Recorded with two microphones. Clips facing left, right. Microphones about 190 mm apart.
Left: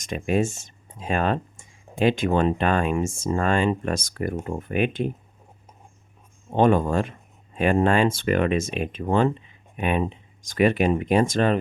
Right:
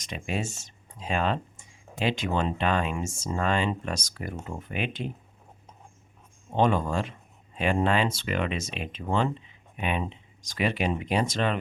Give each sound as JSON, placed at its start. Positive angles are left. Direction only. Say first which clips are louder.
{"t": 0.0, "sound": "speech", "louder": "left 9 dB", "side_deg": 50}
{"t": 6.5, "sound": "speech", "louder": "left 5 dB", "side_deg": 50}